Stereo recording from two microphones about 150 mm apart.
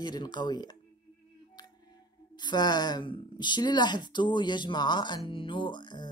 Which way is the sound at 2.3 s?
30° left (ahead or behind).